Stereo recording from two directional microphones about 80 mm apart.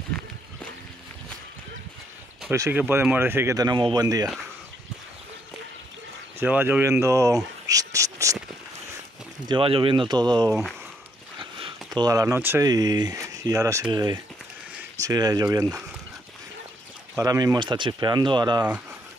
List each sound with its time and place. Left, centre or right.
2.5 s speech: right
3.5 s speech: right
6.4 s speech: right
6.8 s a sound: right
9.5 s speech: right
11.3 s a sound: right
12.1 s speech: right
12.4 s speech: right
12.6 s speech: right
13.8 s speech: right
15.0 s speech: right
17.2 s speech: right
17.6 s speech: right